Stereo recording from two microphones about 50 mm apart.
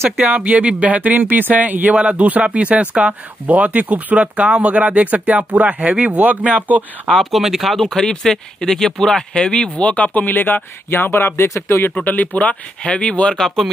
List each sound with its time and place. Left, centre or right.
0.2 s speech: right
1.9 s speech: right
7.1 s speech: centre
8.0 s speech: centre; by 10.6 s left
10.9 s speech: left
11.4 s speech: left
12.0 s speech: left